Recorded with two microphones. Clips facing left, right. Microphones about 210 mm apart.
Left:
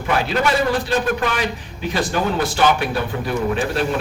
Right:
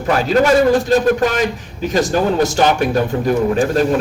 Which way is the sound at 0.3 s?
40° right (ahead or behind).